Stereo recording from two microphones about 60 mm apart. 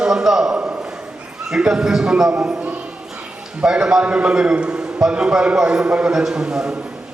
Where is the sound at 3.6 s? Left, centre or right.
Centre.